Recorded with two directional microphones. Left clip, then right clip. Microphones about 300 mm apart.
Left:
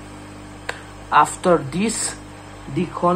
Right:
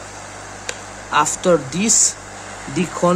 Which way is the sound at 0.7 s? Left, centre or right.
Centre.